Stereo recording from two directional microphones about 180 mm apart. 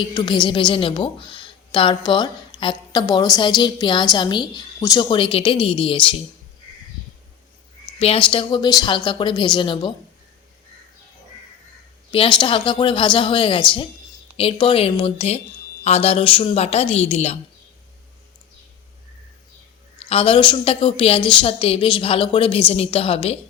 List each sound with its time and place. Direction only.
0.1 s speech: 25° left (ahead or behind)
7.9 s speech: 30° left (ahead or behind)
12.4 s a woman's voice: 30° left (ahead or behind)
20.0 s a woman's voice: 35° left (ahead or behind)